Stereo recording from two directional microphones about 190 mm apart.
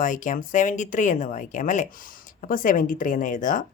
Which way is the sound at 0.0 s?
45° left (ahead or behind).